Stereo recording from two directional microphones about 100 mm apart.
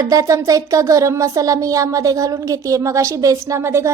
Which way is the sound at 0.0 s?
35° right (ahead or behind).